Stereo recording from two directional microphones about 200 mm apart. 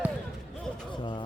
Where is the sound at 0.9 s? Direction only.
25° left (ahead or behind).